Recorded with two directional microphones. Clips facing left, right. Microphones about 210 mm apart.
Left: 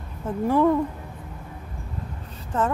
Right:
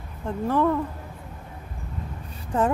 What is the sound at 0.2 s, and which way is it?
Speech, 10° left (ahead or behind).